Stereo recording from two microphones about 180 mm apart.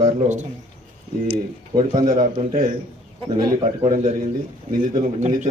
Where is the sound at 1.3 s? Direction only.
25° right (ahead or behind).